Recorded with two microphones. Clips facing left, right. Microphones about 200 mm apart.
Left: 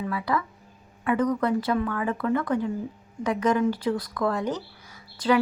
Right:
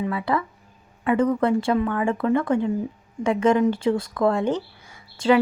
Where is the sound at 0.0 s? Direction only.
25° right (ahead or behind).